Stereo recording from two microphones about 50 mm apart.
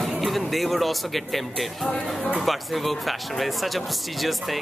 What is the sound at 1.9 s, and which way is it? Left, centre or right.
Speech, left.